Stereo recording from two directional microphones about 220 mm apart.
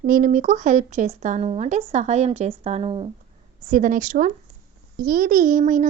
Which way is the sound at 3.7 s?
35° right (ahead or behind).